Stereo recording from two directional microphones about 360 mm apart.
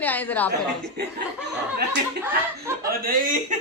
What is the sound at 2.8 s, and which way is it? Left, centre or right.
Speech, right.